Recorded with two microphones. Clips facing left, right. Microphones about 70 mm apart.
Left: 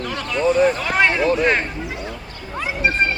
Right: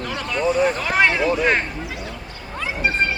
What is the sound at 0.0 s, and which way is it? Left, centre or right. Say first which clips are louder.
Vehicle: left 2 dB; centre.